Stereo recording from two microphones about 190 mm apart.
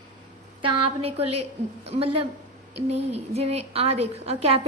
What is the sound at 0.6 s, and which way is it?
A woman's voice, 30° right (ahead or behind).